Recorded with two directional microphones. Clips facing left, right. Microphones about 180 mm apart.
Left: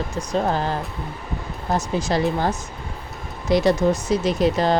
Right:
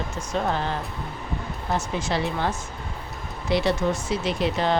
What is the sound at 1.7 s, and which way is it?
Speech, 40° left (ahead or behind).